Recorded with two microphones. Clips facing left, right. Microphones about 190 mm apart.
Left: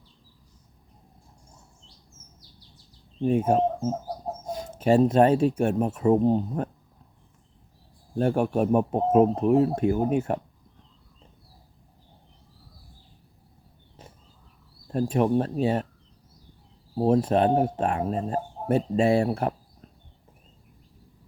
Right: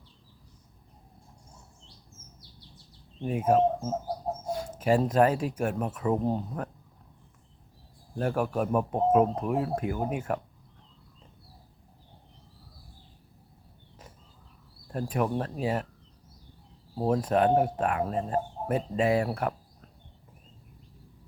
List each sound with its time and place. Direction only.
3.2 s speech: 25° left (ahead or behind)
8.2 s speech: 25° left (ahead or behind)
14.9 s speech: 25° left (ahead or behind)
17.0 s speech: 25° left (ahead or behind)